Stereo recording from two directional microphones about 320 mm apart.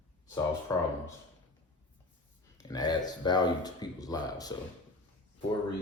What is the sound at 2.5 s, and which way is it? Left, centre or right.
Speech, centre.